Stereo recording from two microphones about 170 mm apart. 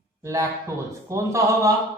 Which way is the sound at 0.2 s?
15° right (ahead or behind).